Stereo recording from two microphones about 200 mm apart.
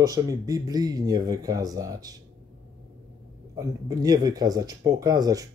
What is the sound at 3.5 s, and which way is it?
Speech, 20° right (ahead or behind).